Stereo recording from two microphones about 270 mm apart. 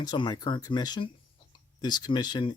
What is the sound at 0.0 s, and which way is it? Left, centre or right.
Speech, centre.